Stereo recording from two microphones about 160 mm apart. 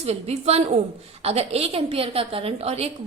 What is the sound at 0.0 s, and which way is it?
A woman's voice, 40° right (ahead or behind).